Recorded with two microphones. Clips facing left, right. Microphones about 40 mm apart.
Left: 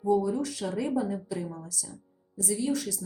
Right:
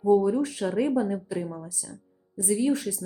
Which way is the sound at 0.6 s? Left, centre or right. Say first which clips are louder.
Right 5 dB; centre.